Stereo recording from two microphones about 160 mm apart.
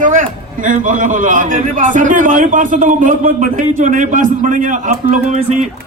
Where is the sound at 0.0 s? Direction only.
55° right (ahead or behind).